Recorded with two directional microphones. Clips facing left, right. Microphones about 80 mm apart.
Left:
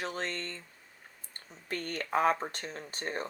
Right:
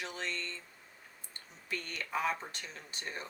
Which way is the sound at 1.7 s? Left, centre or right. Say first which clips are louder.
Left 5 dB; left.